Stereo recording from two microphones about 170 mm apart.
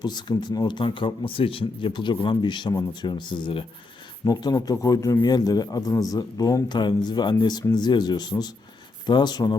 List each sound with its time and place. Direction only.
0.0 s a man's voice: 25° left (ahead or behind)